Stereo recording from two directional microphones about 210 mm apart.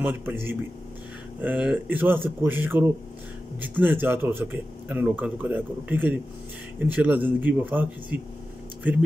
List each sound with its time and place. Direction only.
0.0 s speech: 10° right (ahead or behind)